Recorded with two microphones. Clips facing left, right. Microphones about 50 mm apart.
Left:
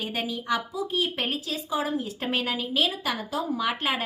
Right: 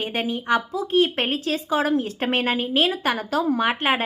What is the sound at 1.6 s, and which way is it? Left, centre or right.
A woman's voice, right.